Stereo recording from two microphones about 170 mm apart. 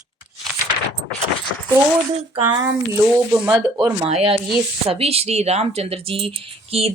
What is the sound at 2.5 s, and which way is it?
Speech, 15° right (ahead or behind).